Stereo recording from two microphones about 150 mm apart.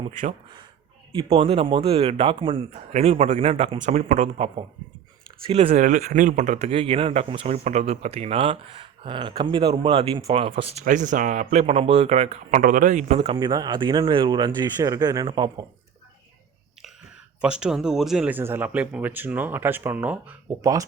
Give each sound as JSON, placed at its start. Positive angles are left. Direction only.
{"t": 1.1, "sound": "speech", "side_deg": -35}
{"t": 2.9, "sound": "speech", "side_deg": -45}
{"t": 10.8, "sound": "speech", "side_deg": -55}
{"t": 13.1, "sound": "speech", "side_deg": -30}
{"t": 17.4, "sound": "speech", "side_deg": -5}